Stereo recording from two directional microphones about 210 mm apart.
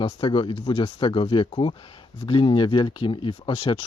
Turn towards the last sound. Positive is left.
turn(degrees=25)  # may be behind; listen again after turning